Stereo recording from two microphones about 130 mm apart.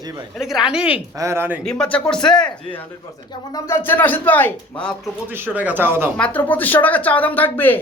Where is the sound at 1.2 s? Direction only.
20° right (ahead or behind).